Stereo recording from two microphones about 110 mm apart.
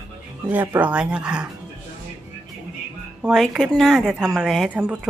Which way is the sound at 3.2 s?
5° right (ahead or behind).